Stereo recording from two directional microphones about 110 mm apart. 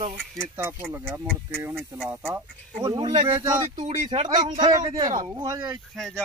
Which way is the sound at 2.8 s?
40° right (ahead or behind).